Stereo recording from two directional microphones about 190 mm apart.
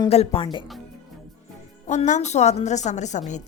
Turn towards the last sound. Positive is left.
turn(degrees=40)  # may be behind; listen again after turning